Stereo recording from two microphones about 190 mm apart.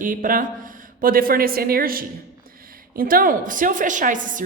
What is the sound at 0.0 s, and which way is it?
A woman's voice, 45° right (ahead or behind).